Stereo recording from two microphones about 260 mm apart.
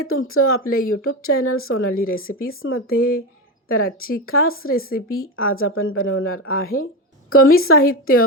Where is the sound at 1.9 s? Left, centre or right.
Left.